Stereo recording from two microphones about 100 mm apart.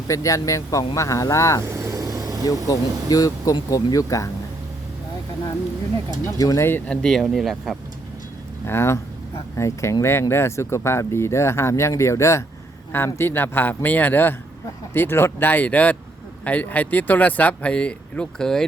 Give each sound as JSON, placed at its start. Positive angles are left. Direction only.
{"t": 0.1, "sound": "speech", "side_deg": 35}
{"t": 1.6, "sound": "vehicle", "side_deg": -30}
{"t": 2.6, "sound": "speech", "side_deg": 35}
{"t": 6.3, "sound": "speech", "side_deg": 35}
{"t": 6.7, "sound": "speech", "side_deg": 20}
{"t": 6.9, "sound": "speech", "side_deg": 5}
{"t": 8.6, "sound": "speech", "side_deg": 25}